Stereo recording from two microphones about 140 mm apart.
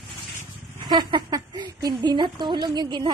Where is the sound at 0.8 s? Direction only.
30° right (ahead or behind).